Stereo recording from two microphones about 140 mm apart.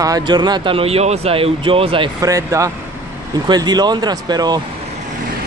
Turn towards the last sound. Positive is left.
turn(degrees=-30)  # may be behind; listen again after turning